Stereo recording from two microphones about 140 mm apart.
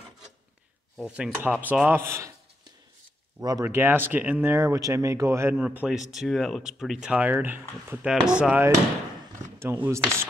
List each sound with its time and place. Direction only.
0.9 s speech: 5° right (ahead or behind)
3.3 s speech: 25° right (ahead or behind)
3.6 s speech: 15° right (ahead or behind)
9.6 s speech: 20° right (ahead or behind)